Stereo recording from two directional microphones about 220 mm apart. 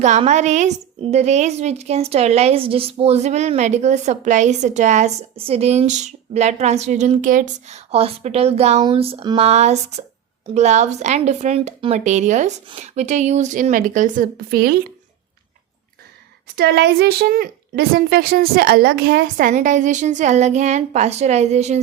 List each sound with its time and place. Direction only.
0.0 s speech: 30° right (ahead or behind)
16.6 s speech: 50° right (ahead or behind); by 21.8 s 30° right (ahead or behind)